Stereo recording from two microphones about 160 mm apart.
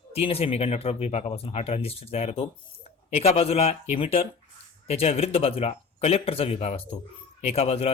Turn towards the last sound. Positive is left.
turn(degrees=40)  # may be behind; listen again after turning